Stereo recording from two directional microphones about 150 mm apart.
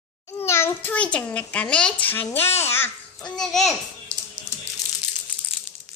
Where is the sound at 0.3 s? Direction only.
15° left (ahead or behind).